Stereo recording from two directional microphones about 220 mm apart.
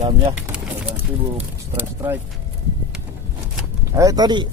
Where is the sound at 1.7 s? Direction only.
10° right (ahead or behind).